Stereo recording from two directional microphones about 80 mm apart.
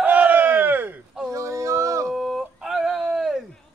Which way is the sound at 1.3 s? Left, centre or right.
Right.